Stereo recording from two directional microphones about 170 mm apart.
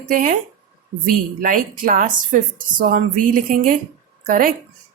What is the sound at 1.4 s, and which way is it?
A woman's voice, 55° right (ahead or behind).